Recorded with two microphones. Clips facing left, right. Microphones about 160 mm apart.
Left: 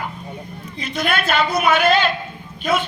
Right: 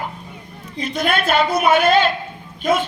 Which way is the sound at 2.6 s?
45° right (ahead or behind).